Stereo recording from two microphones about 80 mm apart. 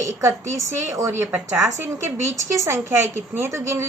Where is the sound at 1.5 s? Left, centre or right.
Right.